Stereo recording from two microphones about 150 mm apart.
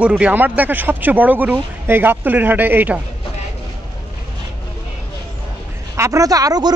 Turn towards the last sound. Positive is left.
turn(degrees=-25)  # may be behind; listen again after turning